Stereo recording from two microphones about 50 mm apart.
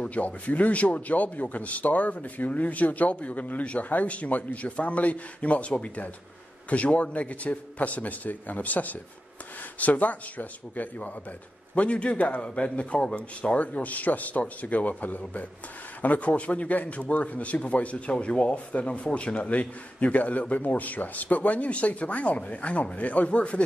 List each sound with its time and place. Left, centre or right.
0.0 s a man's voice: left